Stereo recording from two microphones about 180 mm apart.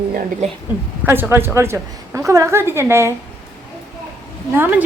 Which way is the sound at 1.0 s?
10° right (ahead or behind).